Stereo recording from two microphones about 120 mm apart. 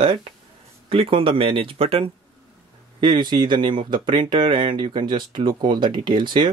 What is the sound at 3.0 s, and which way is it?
Speech, 40° right (ahead or behind).